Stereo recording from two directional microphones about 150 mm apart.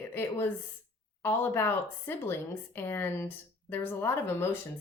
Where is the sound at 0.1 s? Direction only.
15° left (ahead or behind).